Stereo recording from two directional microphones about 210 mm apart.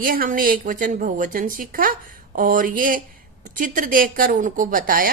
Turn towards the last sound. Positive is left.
turn(degrees=-40)  # may be behind; listen again after turning